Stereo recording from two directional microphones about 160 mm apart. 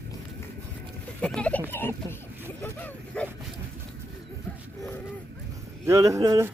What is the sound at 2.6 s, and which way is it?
Dog, 10° left (ahead or behind).